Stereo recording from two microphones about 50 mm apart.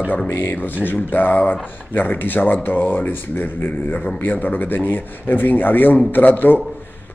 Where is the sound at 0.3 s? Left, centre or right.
Left.